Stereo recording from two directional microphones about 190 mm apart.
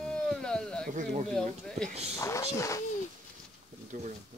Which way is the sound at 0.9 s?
40° right (ahead or behind).